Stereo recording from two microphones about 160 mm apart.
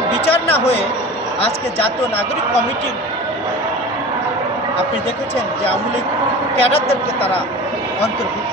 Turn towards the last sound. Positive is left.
turn(degrees=35)  # may be behind; listen again after turning